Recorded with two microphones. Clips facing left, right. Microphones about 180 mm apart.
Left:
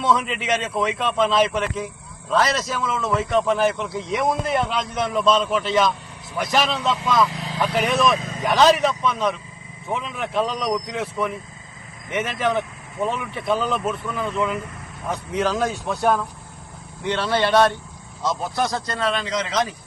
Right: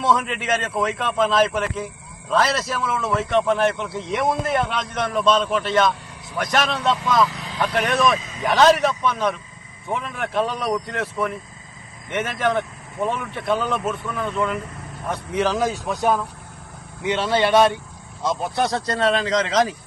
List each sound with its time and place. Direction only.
0.0 s a man's voice: centre (ahead or behind)
8.2 s speech: 50° left (ahead or behind)
8.4 s a man's voice: centre (ahead or behind)
17.2 s speech: 15° right (ahead or behind)
18.5 s speech: 35° right (ahead or behind)